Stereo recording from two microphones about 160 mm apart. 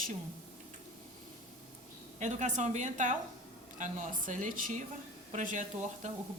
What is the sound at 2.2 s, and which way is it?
Speech, 50° right (ahead or behind).